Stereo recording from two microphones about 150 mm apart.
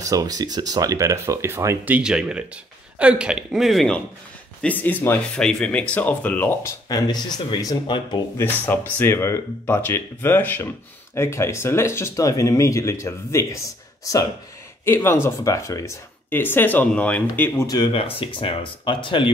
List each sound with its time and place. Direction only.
0.0 s speech: 25° right (ahead or behind)
2.0 s speech: 5° right (ahead or behind); by 6.7 s 10° left (ahead or behind)
6.9 s speech: 25° left (ahead or behind)
8.4 s speech: 15° left (ahead or behind)
17.9 s speech: 35° left (ahead or behind)